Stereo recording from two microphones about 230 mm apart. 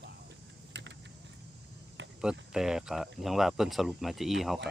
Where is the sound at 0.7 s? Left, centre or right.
Right.